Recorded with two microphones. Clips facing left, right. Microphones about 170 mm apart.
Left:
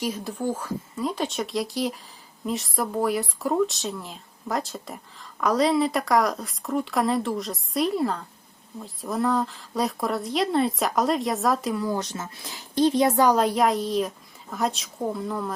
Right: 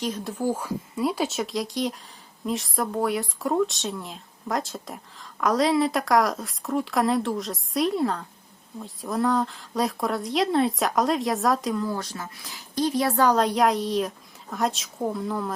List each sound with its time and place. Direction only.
0.0 s speech: 10° left (ahead or behind)
0.3 s speech: 10° right (ahead or behind)
11.9 s speech: 20° left (ahead or behind); by 15.5 s centre (ahead or behind)